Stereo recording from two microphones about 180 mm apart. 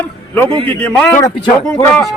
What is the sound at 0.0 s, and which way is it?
Music, 10° left (ahead or behind).